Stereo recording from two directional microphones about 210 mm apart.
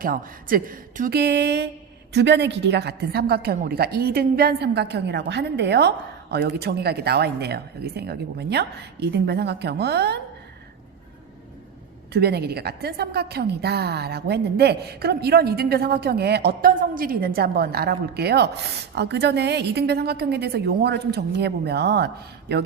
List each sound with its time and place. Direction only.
0.0 s a woman's voice: 40° right (ahead or behind)
12.1 s a woman's voice: 50° right (ahead or behind)